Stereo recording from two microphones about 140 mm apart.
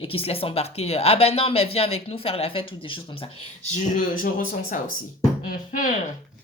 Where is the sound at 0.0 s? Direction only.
40° left (ahead or behind).